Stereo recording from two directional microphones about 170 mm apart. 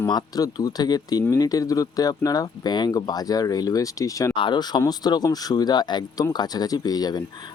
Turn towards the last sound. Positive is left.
turn(degrees=25)  # may be behind; listen again after turning